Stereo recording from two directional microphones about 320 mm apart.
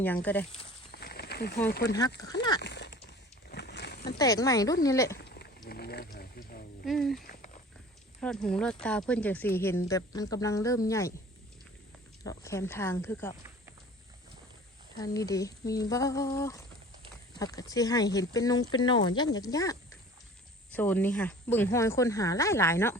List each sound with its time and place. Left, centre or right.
0.0 s speech: centre
0.9 s a sound: left
1.7 s speech: left
2.6 s a sound: left
4.2 s speech: centre
5.1 s a sound: left
5.6 s wild animals: left
6.8 s speech: centre
7.3 s a sound: left
8.2 s speech: centre
12.2 s speech: centre
14.9 s speech: centre
20.7 s speech: centre